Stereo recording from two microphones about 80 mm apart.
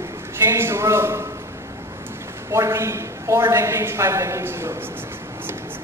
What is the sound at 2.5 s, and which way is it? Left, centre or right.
A woman's voice, right.